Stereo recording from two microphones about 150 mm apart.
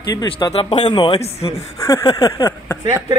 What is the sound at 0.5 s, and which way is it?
Speech, 40° left (ahead or behind).